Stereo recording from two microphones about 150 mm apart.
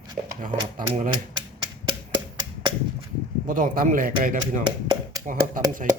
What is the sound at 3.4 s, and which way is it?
Speech, 65° right (ahead or behind).